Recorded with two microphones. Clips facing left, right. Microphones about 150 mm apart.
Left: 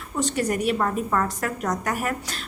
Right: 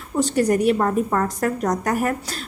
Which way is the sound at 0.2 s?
35° right (ahead or behind).